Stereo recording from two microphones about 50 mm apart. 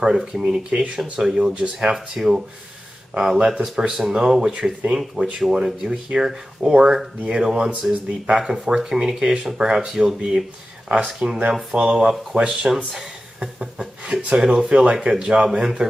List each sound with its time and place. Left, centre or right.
0.0 s speech: centre
1.5 s speech: right
2.0 s speech: centre
4.4 s speech: right